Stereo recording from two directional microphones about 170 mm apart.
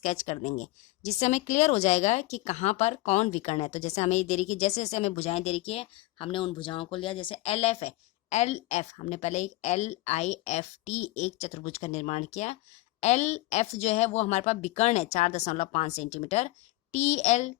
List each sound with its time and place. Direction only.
0.0 s a woman's voice: 45° left (ahead or behind)